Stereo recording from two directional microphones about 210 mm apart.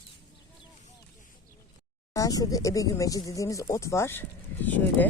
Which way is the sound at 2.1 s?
15° left (ahead or behind).